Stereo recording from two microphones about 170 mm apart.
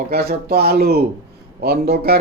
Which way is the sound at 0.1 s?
70° right (ahead or behind).